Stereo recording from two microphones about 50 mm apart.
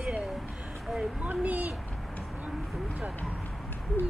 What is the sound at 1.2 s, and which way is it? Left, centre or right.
Speech, right.